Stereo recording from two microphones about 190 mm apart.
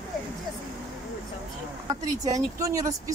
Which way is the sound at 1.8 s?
20° right (ahead or behind).